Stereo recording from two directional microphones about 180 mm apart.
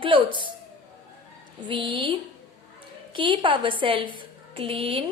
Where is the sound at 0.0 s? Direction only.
30° right (ahead or behind).